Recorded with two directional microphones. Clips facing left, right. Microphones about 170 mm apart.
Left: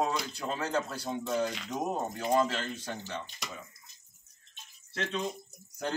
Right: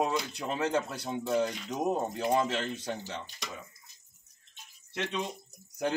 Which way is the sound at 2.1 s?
20° right (ahead or behind).